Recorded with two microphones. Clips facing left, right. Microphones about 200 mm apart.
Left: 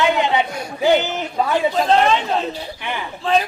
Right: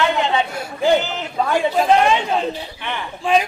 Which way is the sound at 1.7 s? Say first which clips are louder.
Right 1 dB; 10° right (ahead or behind).